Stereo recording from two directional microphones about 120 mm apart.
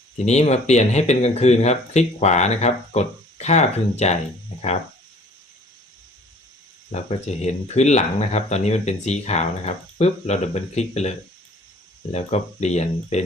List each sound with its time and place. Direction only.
0.3 s speech: 65° left (ahead or behind)
6.9 s speech: 65° left (ahead or behind)
12.1 s speech: 65° left (ahead or behind)